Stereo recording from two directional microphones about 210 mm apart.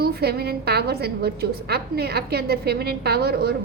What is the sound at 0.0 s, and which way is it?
A woman's voice, 50° right (ahead or behind).